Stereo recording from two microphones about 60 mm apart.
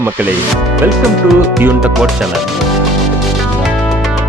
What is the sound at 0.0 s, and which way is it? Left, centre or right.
Speech, right.